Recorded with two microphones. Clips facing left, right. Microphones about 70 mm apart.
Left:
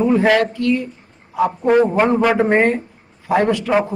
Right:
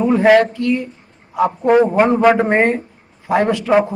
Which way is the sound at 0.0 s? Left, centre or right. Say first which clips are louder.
Right 3 dB; centre.